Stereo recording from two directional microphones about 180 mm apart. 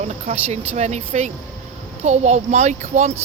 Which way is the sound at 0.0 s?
35° right (ahead or behind).